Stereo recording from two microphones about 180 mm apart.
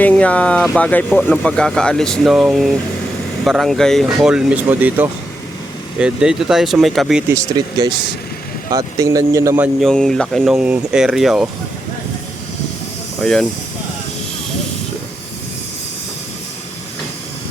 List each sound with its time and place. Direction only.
0.0 s speech: 10° left (ahead or behind)
7.3 s speech: 20° right (ahead or behind)
9.8 s speech: 5° left (ahead or behind)
13.2 s speech: 5° left (ahead or behind)